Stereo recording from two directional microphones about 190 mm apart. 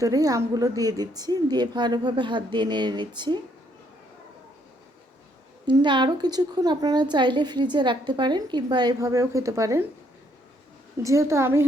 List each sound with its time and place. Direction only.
0.0 s a woman's voice: 20° right (ahead or behind)
5.6 s a woman's voice: 25° right (ahead or behind)
11.0 s a woman's voice: 15° right (ahead or behind)